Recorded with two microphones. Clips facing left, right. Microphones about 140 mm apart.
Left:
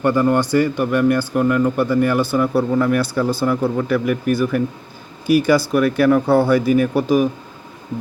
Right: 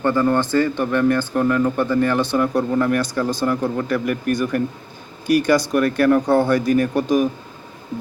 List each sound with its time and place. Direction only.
0.0 s speech: 15° left (ahead or behind)